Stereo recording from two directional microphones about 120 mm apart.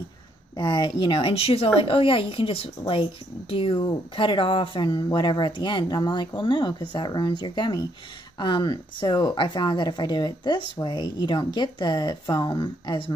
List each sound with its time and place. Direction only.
0.6 s a woman's voice: 35° left (ahead or behind)